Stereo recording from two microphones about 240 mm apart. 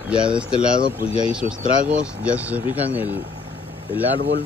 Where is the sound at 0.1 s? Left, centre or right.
Centre.